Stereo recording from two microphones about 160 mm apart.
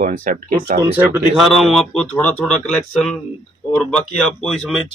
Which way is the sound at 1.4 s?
Centre (ahead or behind).